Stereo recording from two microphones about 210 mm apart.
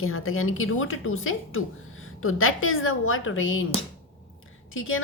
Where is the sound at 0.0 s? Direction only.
80° left.